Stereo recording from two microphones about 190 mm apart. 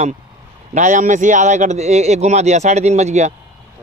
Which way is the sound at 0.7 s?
40° right (ahead or behind).